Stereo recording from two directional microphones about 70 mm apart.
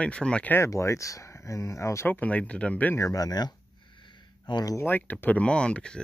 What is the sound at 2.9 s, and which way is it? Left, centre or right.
Speech, left.